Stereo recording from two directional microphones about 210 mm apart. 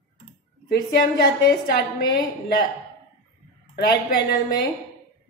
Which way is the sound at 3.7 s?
45° left (ahead or behind).